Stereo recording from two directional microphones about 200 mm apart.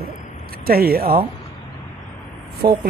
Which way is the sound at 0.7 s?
50° right (ahead or behind).